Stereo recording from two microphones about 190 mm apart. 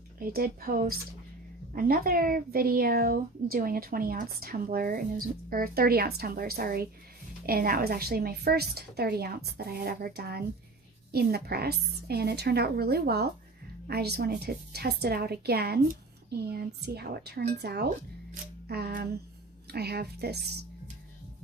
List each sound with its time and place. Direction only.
0.2 s a child's voice: 50° right (ahead or behind)